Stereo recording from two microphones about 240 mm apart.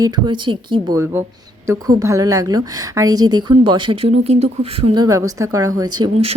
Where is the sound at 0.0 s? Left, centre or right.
Centre.